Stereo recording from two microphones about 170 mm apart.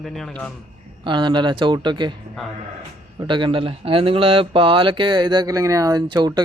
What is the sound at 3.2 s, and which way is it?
Speech, 30° right (ahead or behind).